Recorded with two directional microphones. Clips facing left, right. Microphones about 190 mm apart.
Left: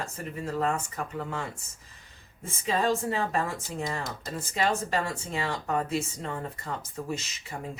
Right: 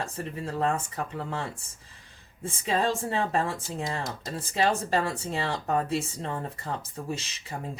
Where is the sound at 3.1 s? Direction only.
30° right (ahead or behind).